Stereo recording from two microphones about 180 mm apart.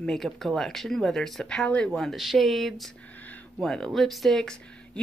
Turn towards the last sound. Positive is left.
turn(degrees=5)  # may be behind; listen again after turning